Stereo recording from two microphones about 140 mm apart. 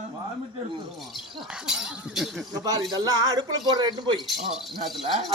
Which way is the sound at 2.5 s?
25° right (ahead or behind).